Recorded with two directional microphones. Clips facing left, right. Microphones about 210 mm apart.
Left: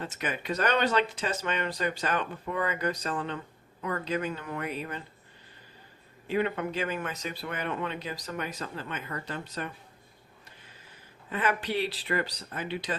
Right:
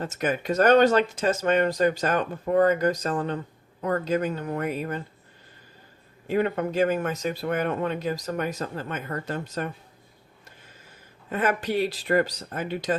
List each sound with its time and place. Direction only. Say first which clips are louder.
0.0 s speech: right 7 dB; 45° right (ahead or behind)
6.2 s speech: right 4 dB; 45° right (ahead or behind)
11.3 s speech: right 4 dB; 45° right (ahead or behind)